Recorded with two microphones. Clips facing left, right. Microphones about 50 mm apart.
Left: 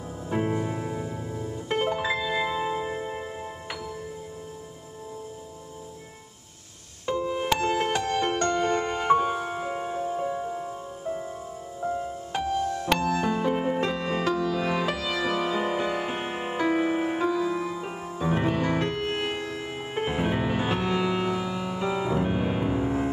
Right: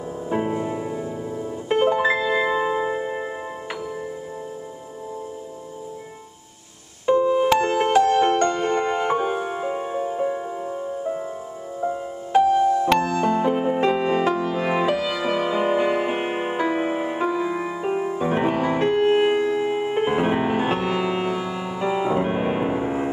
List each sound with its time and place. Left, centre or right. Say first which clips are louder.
0.3 s music: right 3 dB; centre
1.4 s music: right 7 dB; centre
7.1 s music: right 9 dB; centre
13.1 s music: right 5 dB; centre
13.4 s music: right 5 dB; centre
14.2 s music: right 4 dB; right
16.5 s music: left 1 dB; centre
20.2 s music: right 6 dB; right